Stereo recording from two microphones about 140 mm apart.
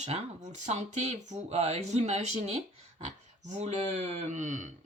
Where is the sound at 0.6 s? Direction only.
55° right (ahead or behind).